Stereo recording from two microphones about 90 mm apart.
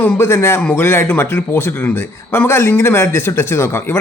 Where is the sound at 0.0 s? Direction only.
25° left (ahead or behind).